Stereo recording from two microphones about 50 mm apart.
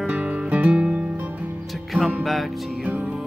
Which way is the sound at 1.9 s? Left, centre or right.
Right.